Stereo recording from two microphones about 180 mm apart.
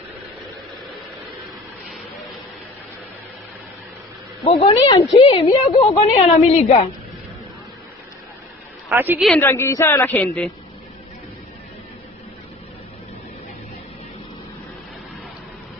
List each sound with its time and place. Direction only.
4.4 s a woman's voice: 30° left (ahead or behind)
8.9 s a woman's voice: 10° right (ahead or behind)
9.4 s speech: 15° left (ahead or behind)